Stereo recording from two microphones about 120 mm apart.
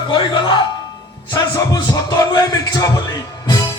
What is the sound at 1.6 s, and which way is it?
Speech, 30° left (ahead or behind).